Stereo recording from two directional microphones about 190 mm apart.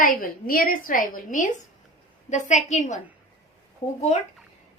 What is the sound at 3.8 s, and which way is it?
Speech, 25° left (ahead or behind).